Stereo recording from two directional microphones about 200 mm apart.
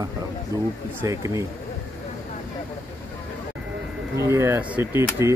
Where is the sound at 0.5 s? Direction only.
15° right (ahead or behind).